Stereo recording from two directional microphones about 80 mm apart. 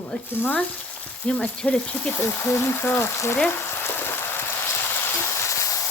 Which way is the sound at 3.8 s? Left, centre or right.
Left.